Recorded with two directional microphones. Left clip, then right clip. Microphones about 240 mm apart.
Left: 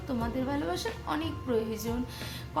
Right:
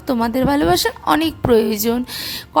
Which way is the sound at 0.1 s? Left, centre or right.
Right.